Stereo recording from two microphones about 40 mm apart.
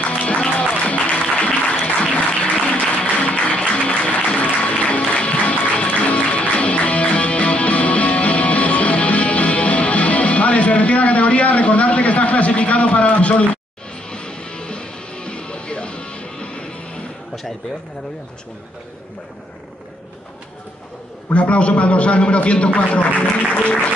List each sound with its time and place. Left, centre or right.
0.0 s music: left
2.6 s applause: left
4.2 s music: left
14.0 s music: left
21.3 s a man's voice: left